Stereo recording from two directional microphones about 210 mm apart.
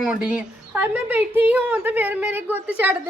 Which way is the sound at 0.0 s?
5° right (ahead or behind).